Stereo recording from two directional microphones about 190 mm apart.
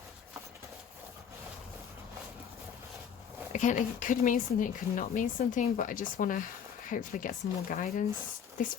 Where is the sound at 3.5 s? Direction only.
40° left (ahead or behind).